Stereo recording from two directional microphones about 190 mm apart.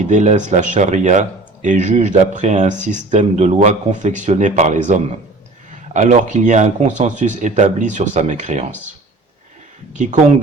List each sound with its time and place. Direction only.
0.0 s speech: 40° right (ahead or behind)
9.9 s speech: 40° right (ahead or behind)